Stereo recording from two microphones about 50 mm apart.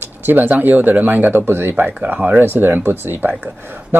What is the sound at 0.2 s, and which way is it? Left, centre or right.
Speech, right.